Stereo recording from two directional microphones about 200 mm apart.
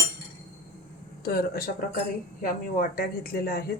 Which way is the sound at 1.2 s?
45° left (ahead or behind).